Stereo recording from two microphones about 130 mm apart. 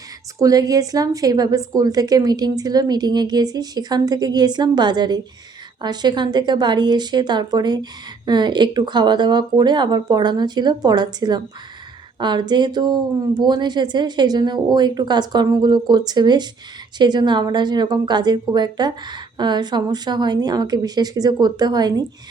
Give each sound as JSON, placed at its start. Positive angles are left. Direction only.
{"t": 0.3, "sound": "a woman's voice", "side_deg": -25}